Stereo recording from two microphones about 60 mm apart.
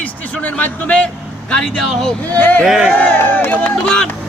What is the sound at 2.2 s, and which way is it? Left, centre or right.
Speech, left.